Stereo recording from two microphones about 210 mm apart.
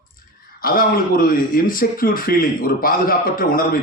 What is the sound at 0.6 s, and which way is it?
Speech, 45° left (ahead or behind).